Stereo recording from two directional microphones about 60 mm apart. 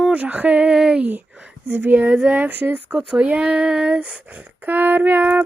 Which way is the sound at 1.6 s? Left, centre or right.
Right.